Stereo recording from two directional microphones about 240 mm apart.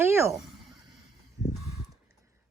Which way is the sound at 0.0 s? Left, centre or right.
Centre.